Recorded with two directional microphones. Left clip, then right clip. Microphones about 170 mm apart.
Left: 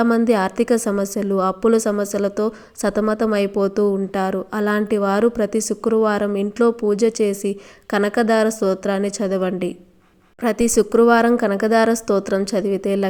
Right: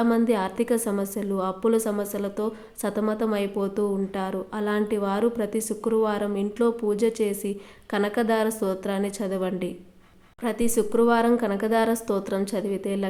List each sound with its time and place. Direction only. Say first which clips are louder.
0.0 s a woman's voice: left 6 dB; 35° left (ahead or behind)